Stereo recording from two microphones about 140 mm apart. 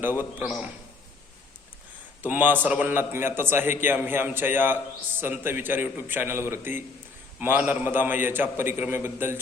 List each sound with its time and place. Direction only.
0.0 s a man's voice: 15° right (ahead or behind)
2.2 s a man's voice: 15° right (ahead or behind)